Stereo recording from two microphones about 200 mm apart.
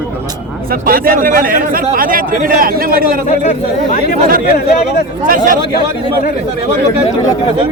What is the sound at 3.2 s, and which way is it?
Speech, 35° left (ahead or behind).